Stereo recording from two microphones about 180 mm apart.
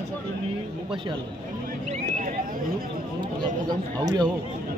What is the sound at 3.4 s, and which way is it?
Speech, 25° right (ahead or behind).